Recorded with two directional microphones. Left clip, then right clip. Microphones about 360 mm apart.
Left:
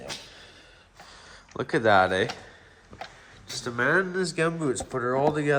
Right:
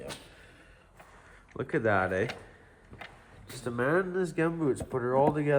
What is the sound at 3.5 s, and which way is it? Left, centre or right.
Speech, centre.